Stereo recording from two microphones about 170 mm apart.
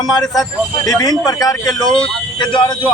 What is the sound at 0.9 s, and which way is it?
Speech, 20° left (ahead or behind).